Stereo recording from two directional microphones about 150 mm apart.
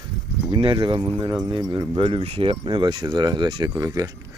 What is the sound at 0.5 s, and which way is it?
Speech, 35° right (ahead or behind).